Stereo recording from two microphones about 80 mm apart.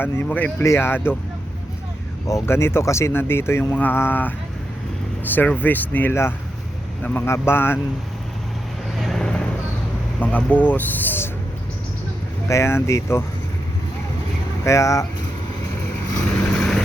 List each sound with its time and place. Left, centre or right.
0.0 s speech: left
0.6 s speech: left
2.5 s speech: left
7.3 s speech: left
9.0 s vehicle: centre
9.2 s a sound: centre
10.2 s speech: left
12.5 s speech: left
14.6 s speech: left
16.4 s vehicle: centre